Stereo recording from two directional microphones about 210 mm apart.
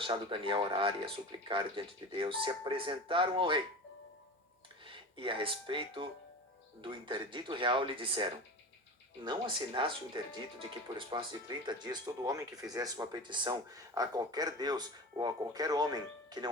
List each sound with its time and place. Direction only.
0.0 s speech: 25° right (ahead or behind)
4.9 s speech: 25° right (ahead or behind)